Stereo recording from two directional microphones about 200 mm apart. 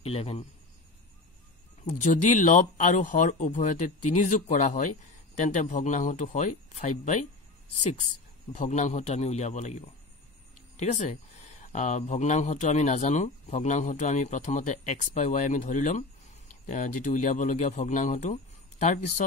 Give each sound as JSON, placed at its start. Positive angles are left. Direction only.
{"t": 0.0, "sound": "speech", "side_deg": 30}
{"t": 1.9, "sound": "speech", "side_deg": 40}
{"t": 8.5, "sound": "speech", "side_deg": 35}